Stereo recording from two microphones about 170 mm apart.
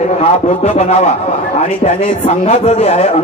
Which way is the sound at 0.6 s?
40° left (ahead or behind).